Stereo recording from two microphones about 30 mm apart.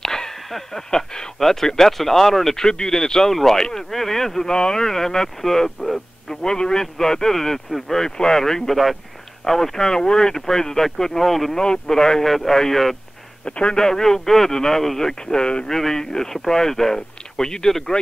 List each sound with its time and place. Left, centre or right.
0.0 s whip: centre
0.6 s speech: centre
2.6 s speech: left
3.9 s speech: centre
4.5 s speech: left
4.8 s speech: centre
6.2 s speech: left
11.5 s speech: left
11.9 s speech: centre
12.3 s speech: centre
13.5 s a man's voice: left
13.7 s speech: centre
15.6 s speech: centre